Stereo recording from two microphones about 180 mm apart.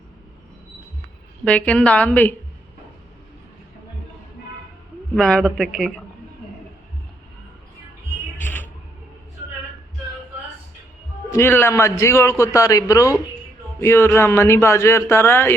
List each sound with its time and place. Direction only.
1.5 s a man's voice: 5° left (ahead or behind)
5.1 s speech: 5° left (ahead or behind)
8.4 s music: 10° left (ahead or behind)
11.3 s a man's voice: 15° left (ahead or behind)